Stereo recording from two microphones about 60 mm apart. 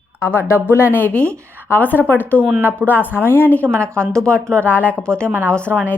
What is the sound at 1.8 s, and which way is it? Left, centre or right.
Speech, left.